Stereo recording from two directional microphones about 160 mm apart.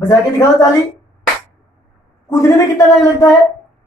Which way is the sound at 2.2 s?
20° left (ahead or behind).